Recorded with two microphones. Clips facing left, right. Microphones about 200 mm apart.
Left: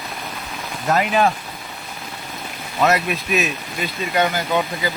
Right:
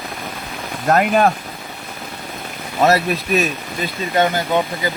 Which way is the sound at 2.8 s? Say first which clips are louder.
Right 3 dB; 35° right (ahead or behind).